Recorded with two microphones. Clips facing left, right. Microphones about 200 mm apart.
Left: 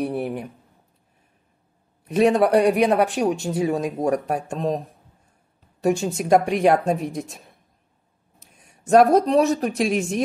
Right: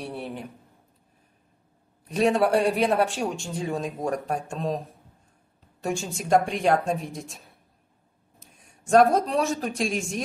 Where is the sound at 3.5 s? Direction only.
45° left (ahead or behind).